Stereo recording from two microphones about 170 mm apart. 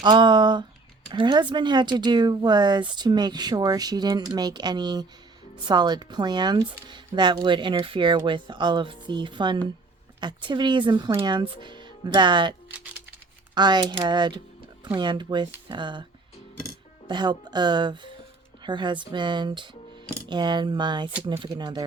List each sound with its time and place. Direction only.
0.0 s speech: 25° right (ahead or behind)
17.1 s speech: 25° right (ahead or behind)